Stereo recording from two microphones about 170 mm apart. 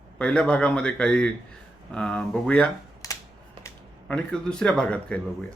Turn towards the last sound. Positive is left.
turn(degrees=5)  # may be behind; listen again after turning